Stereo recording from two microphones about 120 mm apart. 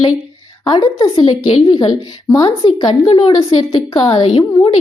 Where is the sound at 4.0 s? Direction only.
45° left (ahead or behind).